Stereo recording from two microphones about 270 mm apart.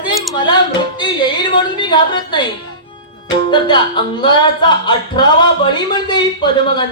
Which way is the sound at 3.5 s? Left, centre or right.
Centre.